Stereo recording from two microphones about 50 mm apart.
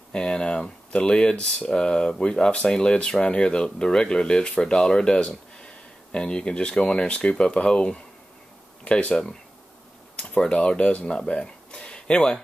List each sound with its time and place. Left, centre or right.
0.1 s speech: centre
10.1 s a sound: left
10.5 s speech: left